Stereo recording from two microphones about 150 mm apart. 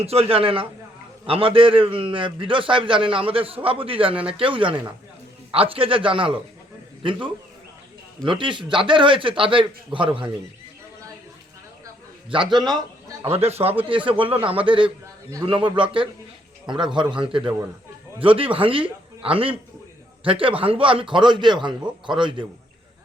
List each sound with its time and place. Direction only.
0.0 s a man's voice: 40° right (ahead or behind)
12.3 s a man's voice: 30° right (ahead or behind)
13.2 s a man's voice: 45° right (ahead or behind)